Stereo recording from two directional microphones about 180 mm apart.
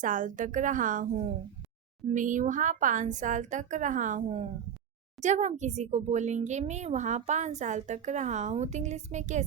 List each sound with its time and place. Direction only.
0.0 s a woman's voice: 45° right (ahead or behind)